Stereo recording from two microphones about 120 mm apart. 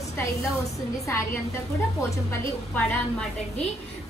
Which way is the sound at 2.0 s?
25° left (ahead or behind).